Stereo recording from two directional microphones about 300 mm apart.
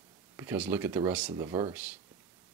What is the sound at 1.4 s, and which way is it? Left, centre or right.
Speech, centre.